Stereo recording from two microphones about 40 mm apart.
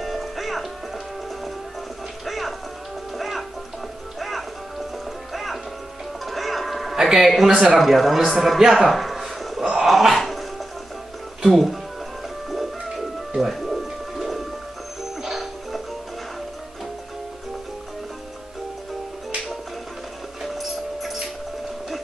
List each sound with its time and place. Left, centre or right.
0.0 s music: centre
7.0 s a man's voice: centre
7.8 s a man's voice: centre
8.7 s a sound: centre
9.8 s dog: centre
11.4 s speech: centre
12.4 s music: centre
20.4 s a sound: centre